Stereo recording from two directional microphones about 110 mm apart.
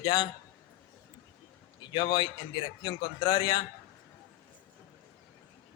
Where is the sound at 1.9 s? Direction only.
45° left (ahead or behind).